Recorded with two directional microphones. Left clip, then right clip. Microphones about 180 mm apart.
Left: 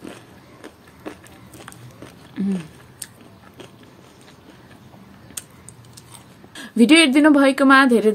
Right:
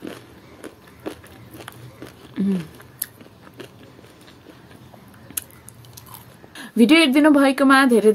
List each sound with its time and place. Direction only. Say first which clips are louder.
0.0 s biting: right 2 dB; 15° right (ahead or behind)
2.3 s a sound: right 2 dB; 15° right (ahead or behind)
6.5 s a woman's voice: left 1 dB; 10° left (ahead or behind)